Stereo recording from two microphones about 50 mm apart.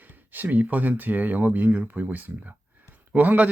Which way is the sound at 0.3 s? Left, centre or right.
Right.